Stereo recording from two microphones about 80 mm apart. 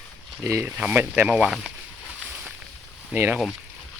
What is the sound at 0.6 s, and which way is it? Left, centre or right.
Speech, right.